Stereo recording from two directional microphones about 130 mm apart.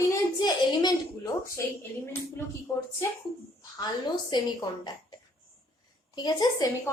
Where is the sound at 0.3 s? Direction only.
30° left (ahead or behind).